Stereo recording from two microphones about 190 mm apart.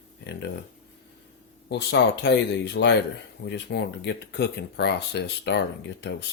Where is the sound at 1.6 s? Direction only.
65° left (ahead or behind).